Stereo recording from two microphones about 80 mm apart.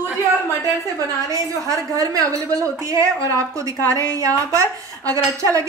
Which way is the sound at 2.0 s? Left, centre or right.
Right.